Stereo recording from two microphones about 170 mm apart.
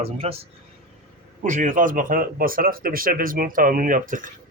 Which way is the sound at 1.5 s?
50° right (ahead or behind).